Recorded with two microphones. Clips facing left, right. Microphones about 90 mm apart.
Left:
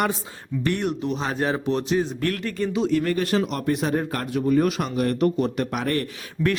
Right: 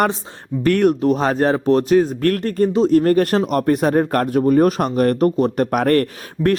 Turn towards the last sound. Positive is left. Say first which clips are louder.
# right 6 dB
turn(degrees=-50)  # may be behind; listen again after turning